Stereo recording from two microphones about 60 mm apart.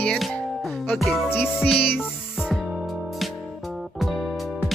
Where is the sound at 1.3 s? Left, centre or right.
Left.